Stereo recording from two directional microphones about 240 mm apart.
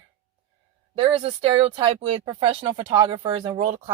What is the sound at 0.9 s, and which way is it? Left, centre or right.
Speech, right.